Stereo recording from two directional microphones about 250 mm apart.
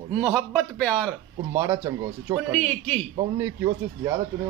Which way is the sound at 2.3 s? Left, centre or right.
Centre.